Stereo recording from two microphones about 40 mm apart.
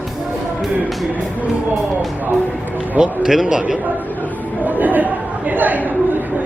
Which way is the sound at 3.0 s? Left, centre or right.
Centre.